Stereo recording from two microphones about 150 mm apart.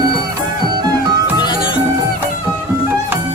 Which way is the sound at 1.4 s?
30° left (ahead or behind).